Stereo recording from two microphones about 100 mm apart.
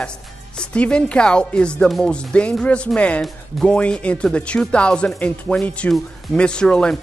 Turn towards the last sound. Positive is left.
turn(degrees=10)  # may be behind; listen again after turning